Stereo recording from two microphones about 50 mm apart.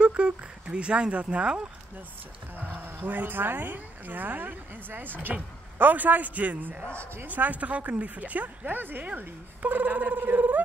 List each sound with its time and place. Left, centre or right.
0.0 s speech: right
2.5 s speech: right